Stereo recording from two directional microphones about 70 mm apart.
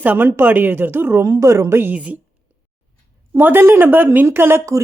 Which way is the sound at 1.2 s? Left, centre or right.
Right.